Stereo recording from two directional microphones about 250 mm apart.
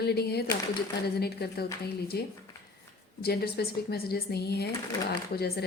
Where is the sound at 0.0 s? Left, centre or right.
Left.